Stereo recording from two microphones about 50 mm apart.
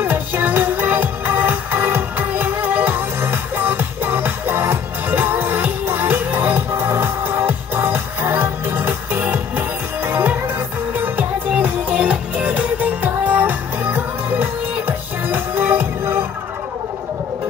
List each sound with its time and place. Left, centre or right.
0.0 s music: right
6.7 s music: right
11.6 s music: right